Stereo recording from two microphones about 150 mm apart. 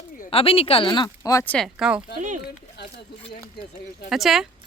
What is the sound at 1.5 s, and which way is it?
Speech, centre (ahead or behind).